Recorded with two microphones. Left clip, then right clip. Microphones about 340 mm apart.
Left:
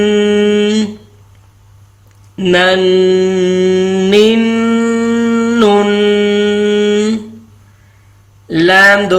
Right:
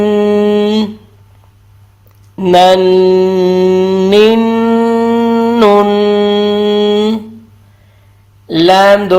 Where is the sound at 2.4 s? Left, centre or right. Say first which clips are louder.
Right 4 dB; centre.